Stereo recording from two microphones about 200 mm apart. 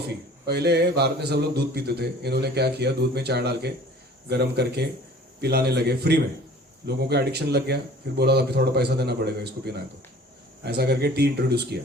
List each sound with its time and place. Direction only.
0.4 s a man's voice: 55° right (ahead or behind)